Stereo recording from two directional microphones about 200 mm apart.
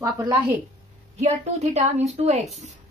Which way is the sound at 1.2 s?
35° right (ahead or behind).